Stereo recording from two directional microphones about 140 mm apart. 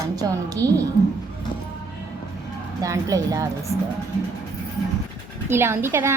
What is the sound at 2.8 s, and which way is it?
Speech, 25° right (ahead or behind).